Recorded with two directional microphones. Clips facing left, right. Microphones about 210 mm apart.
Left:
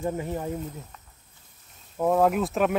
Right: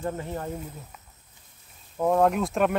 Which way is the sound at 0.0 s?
10° left (ahead or behind).